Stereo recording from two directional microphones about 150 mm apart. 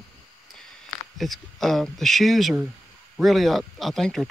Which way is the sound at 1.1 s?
Centre (ahead or behind).